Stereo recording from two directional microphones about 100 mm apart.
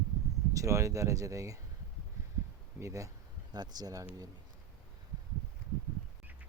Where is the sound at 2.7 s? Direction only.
30° right (ahead or behind).